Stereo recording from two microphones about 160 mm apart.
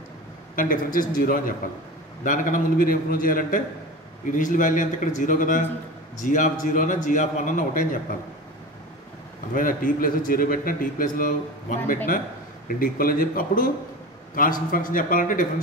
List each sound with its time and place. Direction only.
0.6 s a man's voice: 60° left (ahead or behind)
9.5 s a man's voice: 60° left (ahead or behind)